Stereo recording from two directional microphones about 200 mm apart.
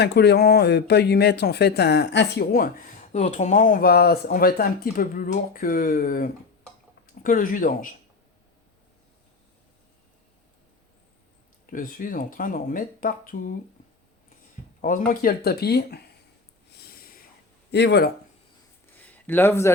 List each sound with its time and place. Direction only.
0.0 s speech: 55° left (ahead or behind)
11.6 s speech: 45° left (ahead or behind)
14.8 s speech: 40° left (ahead or behind)
16.8 s snort: 50° left (ahead or behind)
17.7 s speech: 55° left (ahead or behind)
18.9 s a sound: 10° left (ahead or behind)